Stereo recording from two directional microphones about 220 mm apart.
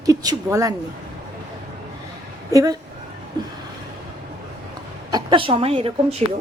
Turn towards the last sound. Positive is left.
turn(degrees=-25)  # may be behind; listen again after turning